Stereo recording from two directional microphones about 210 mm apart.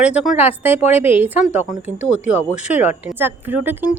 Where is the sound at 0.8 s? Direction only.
30° left (ahead or behind).